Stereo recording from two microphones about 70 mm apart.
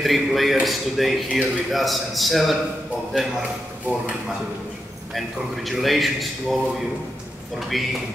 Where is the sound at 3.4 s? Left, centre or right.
Centre.